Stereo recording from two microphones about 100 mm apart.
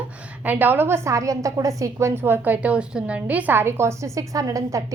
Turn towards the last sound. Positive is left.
turn(degrees=-35)  # may be behind; listen again after turning